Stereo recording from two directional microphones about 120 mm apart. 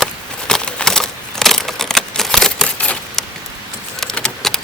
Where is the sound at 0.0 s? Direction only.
5° left (ahead or behind).